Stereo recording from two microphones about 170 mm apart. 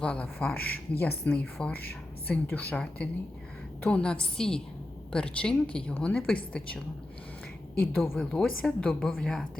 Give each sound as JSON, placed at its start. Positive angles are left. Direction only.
{"t": 0.0, "sound": "a woman's voice", "side_deg": 5}